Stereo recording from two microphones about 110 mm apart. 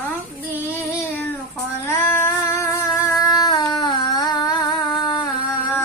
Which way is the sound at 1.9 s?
20° left (ahead or behind).